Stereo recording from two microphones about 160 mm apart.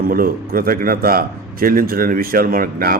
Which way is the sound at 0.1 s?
65° right (ahead or behind).